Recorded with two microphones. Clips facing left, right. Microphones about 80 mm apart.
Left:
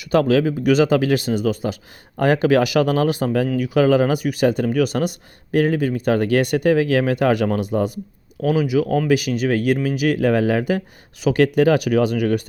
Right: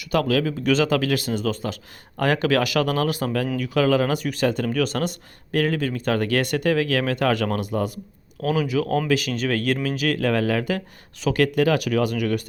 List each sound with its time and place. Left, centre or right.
0.0 s speech: left